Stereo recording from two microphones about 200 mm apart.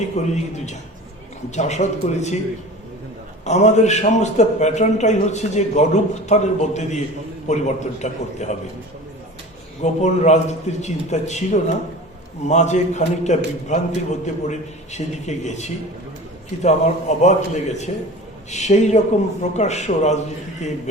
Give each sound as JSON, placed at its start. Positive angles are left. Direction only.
{"t": 0.0, "sound": "a man's voice", "side_deg": 35}
{"t": 3.4, "sound": "a man's voice", "side_deg": 35}
{"t": 9.8, "sound": "a man's voice", "side_deg": 35}